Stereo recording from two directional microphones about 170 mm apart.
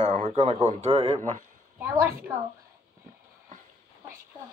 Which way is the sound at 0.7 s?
40° right (ahead or behind).